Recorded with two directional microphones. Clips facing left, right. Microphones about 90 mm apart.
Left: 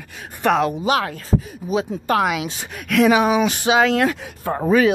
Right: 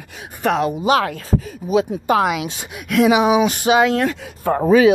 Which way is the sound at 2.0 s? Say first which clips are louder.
Right 2 dB; 15° right (ahead or behind).